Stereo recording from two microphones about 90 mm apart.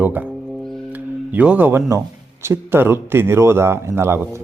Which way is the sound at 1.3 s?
20° right (ahead or behind).